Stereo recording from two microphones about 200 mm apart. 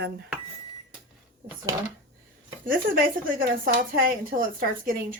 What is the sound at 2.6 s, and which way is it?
Speech, 45° right (ahead or behind).